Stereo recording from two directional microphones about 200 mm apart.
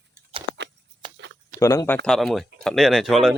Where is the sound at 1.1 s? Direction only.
60° right (ahead or behind).